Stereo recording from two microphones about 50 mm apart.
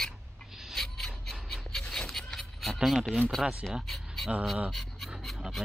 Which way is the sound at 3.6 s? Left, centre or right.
Centre.